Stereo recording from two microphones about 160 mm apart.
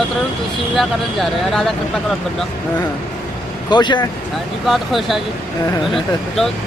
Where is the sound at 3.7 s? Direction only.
30° left (ahead or behind).